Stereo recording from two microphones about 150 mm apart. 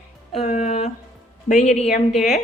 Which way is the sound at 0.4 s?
50° left (ahead or behind).